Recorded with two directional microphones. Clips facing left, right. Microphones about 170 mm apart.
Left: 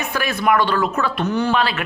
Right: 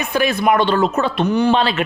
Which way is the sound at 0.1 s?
20° right (ahead or behind).